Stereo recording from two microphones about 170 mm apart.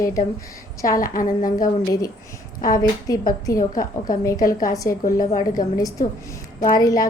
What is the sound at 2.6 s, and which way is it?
Speech, 20° left (ahead or behind).